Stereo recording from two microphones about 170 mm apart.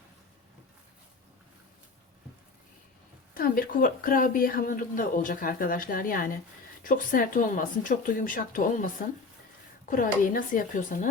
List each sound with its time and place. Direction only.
3.3 s speech: 60° left (ahead or behind)
9.9 s speech: 50° left (ahead or behind)